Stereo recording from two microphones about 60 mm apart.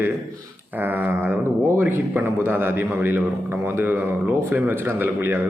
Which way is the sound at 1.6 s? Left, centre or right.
Right.